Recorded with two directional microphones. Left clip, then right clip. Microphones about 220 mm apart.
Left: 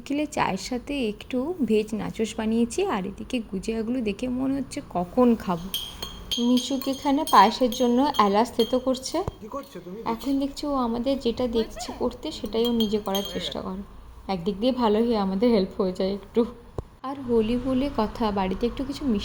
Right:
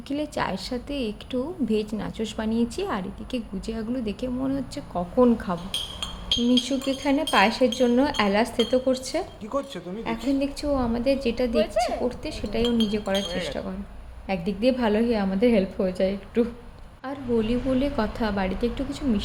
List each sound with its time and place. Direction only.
0.1 s a woman's voice: 20° left (ahead or behind)
6.0 s chink: centre (ahead or behind)
6.7 s a woman's voice: 15° left (ahead or behind)